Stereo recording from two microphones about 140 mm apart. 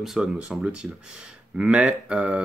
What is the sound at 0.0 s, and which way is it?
Speech, 5° right (ahead or behind).